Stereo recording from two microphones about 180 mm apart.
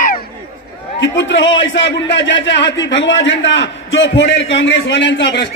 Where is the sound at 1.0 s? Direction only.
85° left.